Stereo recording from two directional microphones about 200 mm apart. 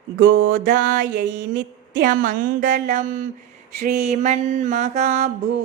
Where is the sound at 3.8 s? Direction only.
35° right (ahead or behind).